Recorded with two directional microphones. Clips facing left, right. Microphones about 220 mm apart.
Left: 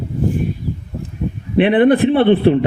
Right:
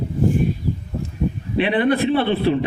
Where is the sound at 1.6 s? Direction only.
55° left (ahead or behind).